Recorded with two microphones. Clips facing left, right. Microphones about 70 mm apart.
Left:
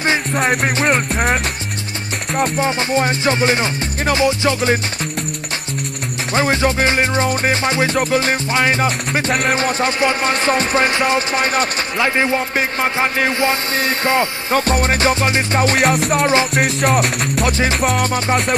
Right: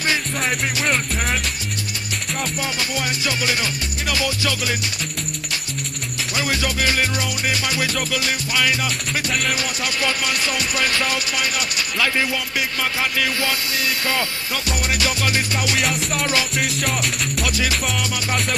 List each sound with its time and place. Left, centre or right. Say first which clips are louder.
0.0 s music: left 5 dB; left
0.4 s music: left 6 dB; left
6.3 s music: left 8 dB; left
15.8 s music: left 8 dB; left
16.2 s music: left 5 dB; left
16.5 s music: left 8 dB; left
17.5 s music: left 4 dB; left